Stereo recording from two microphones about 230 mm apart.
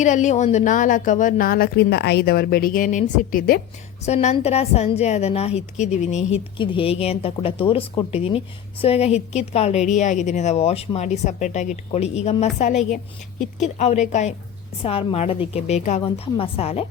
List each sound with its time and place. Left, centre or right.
0.0 s a woman's voice: left